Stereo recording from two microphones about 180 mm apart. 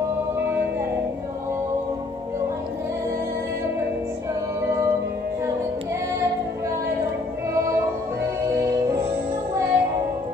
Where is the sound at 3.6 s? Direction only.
15° right (ahead or behind).